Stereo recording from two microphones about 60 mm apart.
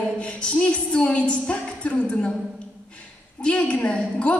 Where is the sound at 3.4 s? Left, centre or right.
Left.